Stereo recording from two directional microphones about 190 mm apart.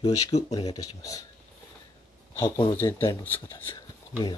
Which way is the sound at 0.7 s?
20° left (ahead or behind).